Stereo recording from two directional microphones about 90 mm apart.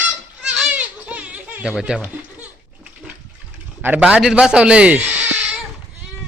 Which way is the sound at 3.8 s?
20° right (ahead or behind).